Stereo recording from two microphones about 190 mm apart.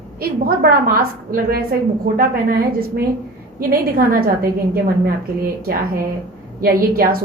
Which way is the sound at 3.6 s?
50° right (ahead or behind).